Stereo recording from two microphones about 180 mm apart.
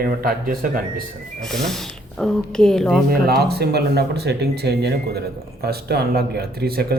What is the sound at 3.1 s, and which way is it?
Speech, 60° right (ahead or behind).